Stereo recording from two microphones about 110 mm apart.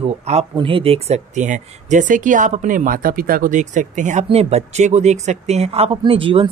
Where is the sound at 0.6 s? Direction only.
55° right (ahead or behind); by 2.0 s 90° right.